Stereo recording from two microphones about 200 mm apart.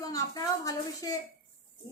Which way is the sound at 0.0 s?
20° left (ahead or behind).